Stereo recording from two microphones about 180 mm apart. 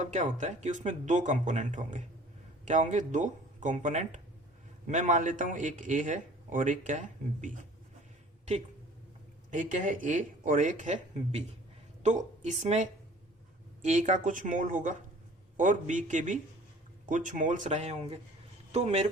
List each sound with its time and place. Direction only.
0.0 s a man's voice: 40° right (ahead or behind)
9.5 s a man's voice: 45° right (ahead or behind)